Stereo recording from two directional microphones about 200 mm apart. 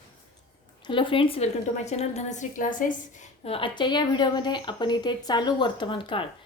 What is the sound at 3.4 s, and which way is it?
A woman's voice, 25° left (ahead or behind).